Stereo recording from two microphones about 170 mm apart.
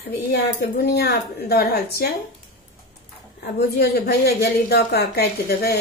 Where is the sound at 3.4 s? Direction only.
70° left (ahead or behind).